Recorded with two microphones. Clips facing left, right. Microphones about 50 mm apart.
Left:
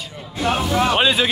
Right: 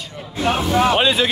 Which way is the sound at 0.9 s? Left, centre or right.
Centre.